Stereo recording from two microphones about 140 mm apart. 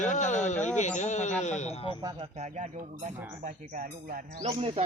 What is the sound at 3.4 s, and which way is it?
Speech, 85° right.